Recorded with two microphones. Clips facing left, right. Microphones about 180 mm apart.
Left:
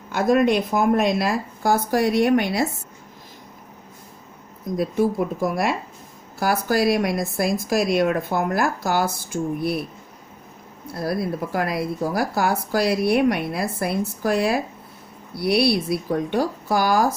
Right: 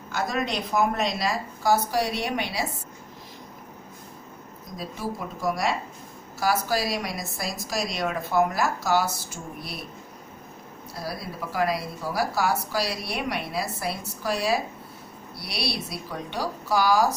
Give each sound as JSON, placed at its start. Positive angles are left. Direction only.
{"t": 0.1, "sound": "speech", "side_deg": 55}
{"t": 4.8, "sound": "speech", "side_deg": 55}
{"t": 10.8, "sound": "speech", "side_deg": 55}